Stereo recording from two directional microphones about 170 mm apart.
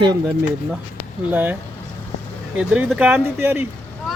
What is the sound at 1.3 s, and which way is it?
Speech, 10° right (ahead or behind).